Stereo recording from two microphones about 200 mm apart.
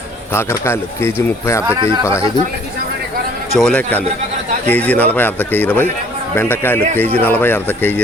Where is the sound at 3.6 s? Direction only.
5° left (ahead or behind).